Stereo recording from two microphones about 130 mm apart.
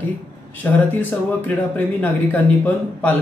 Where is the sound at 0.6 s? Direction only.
15° left (ahead or behind).